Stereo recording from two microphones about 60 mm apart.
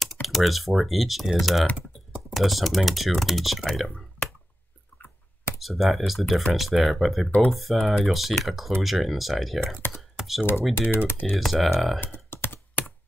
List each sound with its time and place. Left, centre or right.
0.0 s speech: centre
5.6 s speech: centre
7.2 s speech: left
7.5 s speech: centre
9.8 s speech: left
10.1 s computer keyboard: centre
10.7 s speech: left
11.2 s speech: centre
12.0 s computer keyboard: left